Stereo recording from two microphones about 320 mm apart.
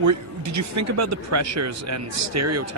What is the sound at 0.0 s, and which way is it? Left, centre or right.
Speech, right.